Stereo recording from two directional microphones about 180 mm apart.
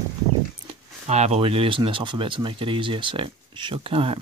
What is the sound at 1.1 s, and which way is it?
Speech, 35° right (ahead or behind).